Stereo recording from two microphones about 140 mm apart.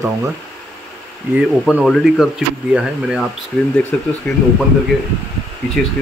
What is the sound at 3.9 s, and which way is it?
Speech, 10° left (ahead or behind).